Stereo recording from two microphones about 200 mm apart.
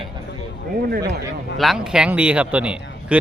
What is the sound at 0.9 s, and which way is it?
Speech, 50° right (ahead or behind).